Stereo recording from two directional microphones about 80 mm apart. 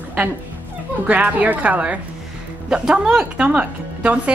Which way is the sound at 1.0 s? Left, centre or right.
Centre.